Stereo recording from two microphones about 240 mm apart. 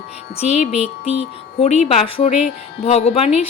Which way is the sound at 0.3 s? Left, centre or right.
Left.